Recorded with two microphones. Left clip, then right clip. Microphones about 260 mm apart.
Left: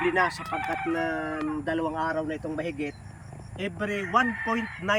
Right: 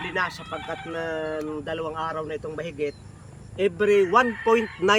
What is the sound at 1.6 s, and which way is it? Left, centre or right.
Speech, centre.